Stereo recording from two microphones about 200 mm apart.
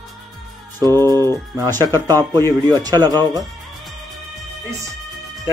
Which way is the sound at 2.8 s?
20° right (ahead or behind).